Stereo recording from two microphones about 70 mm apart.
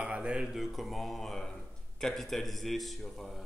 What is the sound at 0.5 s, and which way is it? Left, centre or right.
Speech, centre.